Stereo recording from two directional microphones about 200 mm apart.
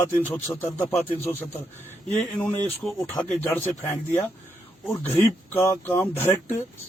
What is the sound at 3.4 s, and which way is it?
Speech, 10° left (ahead or behind).